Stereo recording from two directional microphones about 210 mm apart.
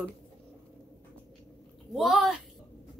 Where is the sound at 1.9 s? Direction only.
Centre (ahead or behind).